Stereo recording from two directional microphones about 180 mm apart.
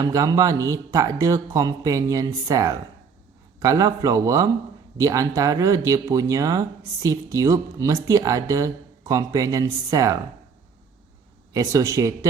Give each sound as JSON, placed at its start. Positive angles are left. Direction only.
{"t": 0.0, "sound": "speech", "side_deg": -20}
{"t": 11.5, "sound": "speech", "side_deg": -20}